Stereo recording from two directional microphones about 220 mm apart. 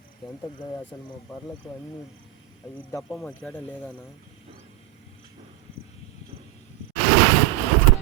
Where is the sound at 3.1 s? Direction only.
Centre (ahead or behind).